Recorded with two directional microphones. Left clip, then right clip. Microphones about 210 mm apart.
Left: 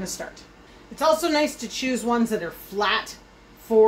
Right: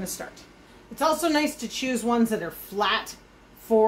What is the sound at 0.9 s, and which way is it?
Speech, 20° right (ahead or behind).